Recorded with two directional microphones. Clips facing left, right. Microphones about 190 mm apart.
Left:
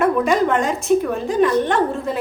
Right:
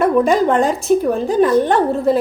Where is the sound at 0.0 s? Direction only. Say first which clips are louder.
Right 3 dB; 35° right (ahead or behind).